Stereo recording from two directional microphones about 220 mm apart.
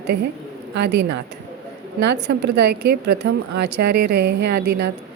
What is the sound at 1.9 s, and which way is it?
A woman's voice, 50° right (ahead or behind).